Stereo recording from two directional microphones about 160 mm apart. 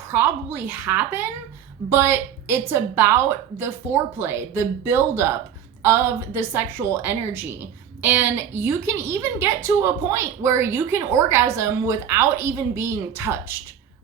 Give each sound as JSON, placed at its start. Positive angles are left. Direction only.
{"t": 0.1, "sound": "a woman's voice", "side_deg": -10}